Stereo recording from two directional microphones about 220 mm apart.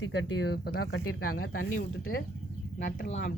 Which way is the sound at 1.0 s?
80° left.